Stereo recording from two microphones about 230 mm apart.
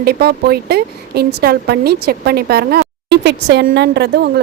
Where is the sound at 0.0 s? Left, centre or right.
Right.